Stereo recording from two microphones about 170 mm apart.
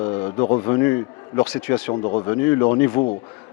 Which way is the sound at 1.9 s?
30° left (ahead or behind).